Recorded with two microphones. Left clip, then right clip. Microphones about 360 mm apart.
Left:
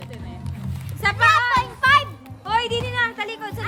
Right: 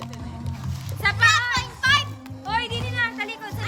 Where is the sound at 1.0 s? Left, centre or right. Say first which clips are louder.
Left 1 dB; centre.